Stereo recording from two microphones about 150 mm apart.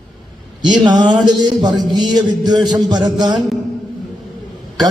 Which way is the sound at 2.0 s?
30° right (ahead or behind).